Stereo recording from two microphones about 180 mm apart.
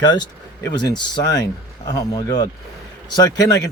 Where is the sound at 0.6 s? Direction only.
20° left (ahead or behind).